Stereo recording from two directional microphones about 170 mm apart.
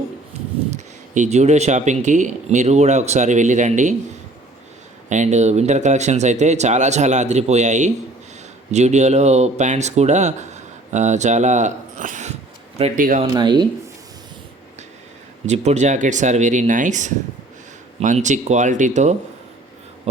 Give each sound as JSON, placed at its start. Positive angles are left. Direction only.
{"t": 0.7, "sound": "speech", "side_deg": -45}
{"t": 5.0, "sound": "speech", "side_deg": -45}
{"t": 13.3, "sound": "speech", "side_deg": -25}
{"t": 15.4, "sound": "speech", "side_deg": -40}